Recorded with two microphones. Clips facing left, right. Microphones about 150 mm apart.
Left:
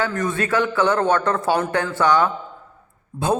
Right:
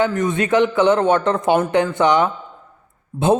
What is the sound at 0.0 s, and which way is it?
A man's voice, 20° right (ahead or behind).